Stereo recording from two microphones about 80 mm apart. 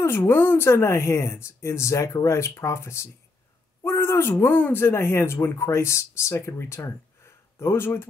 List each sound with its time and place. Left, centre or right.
0.0 s speech: left